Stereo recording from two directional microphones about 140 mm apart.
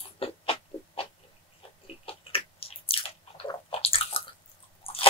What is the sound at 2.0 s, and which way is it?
Biting, 40° left (ahead or behind).